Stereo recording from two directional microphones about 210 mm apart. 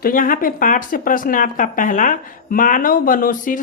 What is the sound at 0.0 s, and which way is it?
Speech, 40° left (ahead or behind).